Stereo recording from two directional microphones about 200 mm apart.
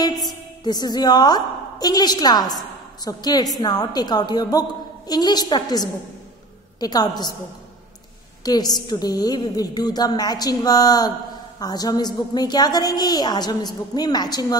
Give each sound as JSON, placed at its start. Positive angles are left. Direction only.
{"t": 0.3, "sound": "a woman's voice", "side_deg": 20}
{"t": 8.5, "sound": "a woman's voice", "side_deg": 20}